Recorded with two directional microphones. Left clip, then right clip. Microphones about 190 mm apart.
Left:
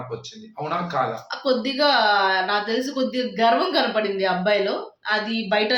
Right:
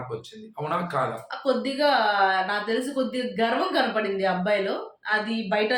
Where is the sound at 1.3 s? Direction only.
15° left (ahead or behind).